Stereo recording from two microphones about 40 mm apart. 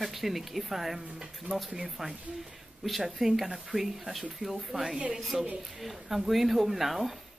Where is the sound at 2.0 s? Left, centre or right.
Centre.